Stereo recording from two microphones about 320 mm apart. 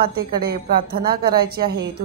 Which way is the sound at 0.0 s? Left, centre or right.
Right.